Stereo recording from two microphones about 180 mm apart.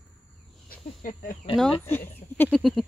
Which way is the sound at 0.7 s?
50° left (ahead or behind).